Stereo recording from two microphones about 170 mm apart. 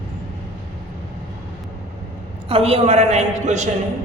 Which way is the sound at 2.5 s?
35° right (ahead or behind).